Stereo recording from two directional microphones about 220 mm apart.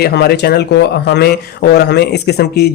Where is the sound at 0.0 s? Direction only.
45° left (ahead or behind).